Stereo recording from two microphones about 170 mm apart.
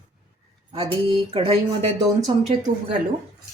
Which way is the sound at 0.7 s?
30° right (ahead or behind).